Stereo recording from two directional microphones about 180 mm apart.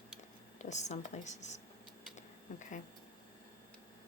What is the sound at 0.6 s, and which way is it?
Speech, 40° left (ahead or behind).